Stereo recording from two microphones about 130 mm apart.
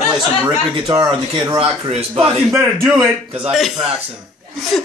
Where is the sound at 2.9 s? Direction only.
Centre (ahead or behind).